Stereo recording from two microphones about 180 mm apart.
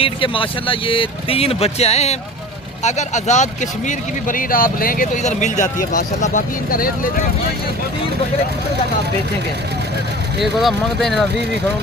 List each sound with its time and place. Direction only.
0.0 s speech: 30° left (ahead or behind); by 7.3 s 55° left (ahead or behind)
10.4 s speech: centre (ahead or behind)